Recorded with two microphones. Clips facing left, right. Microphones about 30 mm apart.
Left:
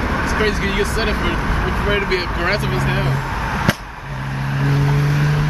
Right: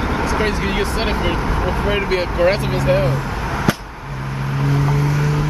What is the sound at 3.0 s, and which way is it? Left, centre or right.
Speech, left.